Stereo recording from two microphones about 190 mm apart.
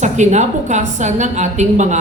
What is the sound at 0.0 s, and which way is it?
A woman's voice, 40° right (ahead or behind).